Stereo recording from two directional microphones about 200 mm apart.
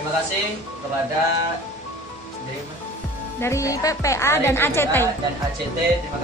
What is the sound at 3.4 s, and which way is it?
A woman's voice, 15° left (ahead or behind).